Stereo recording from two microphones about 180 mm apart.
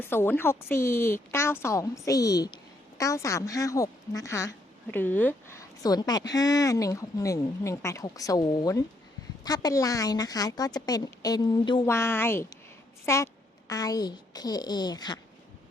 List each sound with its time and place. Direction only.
0.0 s a woman's voice: 10° left (ahead or behind)
11.9 s a woman's voice: 15° left (ahead or behind)